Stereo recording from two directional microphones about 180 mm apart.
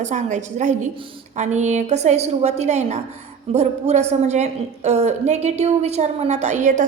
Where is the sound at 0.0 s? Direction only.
40° right (ahead or behind).